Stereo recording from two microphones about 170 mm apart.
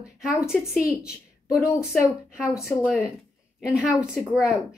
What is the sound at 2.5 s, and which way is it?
Speech, 15° left (ahead or behind).